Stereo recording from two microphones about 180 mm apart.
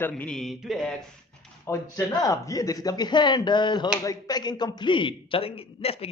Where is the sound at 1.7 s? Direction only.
15° left (ahead or behind).